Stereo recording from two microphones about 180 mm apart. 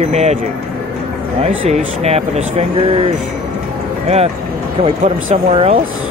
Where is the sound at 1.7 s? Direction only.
40° right (ahead or behind).